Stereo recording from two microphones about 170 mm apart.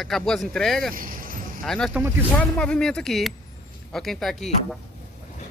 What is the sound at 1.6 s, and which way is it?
Speech, 5° left (ahead or behind).